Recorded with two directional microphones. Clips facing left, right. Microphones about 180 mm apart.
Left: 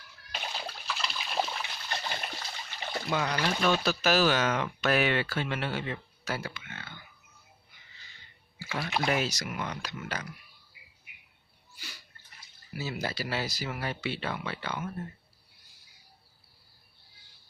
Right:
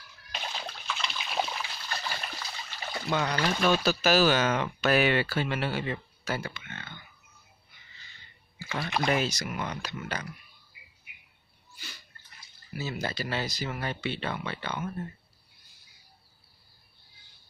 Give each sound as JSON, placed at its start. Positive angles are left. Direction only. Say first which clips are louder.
{"t": 0.3, "sound": "splash", "louder": "even", "side_deg": 5}
{"t": 1.9, "sound": "water", "louder": "left 2 dB", "side_deg": 25}
{"t": 3.1, "sound": "speech", "louder": "right 2 dB", "side_deg": 0}
{"t": 8.5, "sound": "speech", "louder": "right 1 dB", "side_deg": 5}
{"t": 11.7, "sound": "a sound", "louder": "right 1 dB", "side_deg": 10}
{"t": 12.7, "sound": "speech", "louder": "right 1 dB", "side_deg": 10}